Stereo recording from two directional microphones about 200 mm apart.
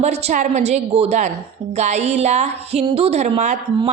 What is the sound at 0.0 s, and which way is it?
Speech, 35° right (ahead or behind).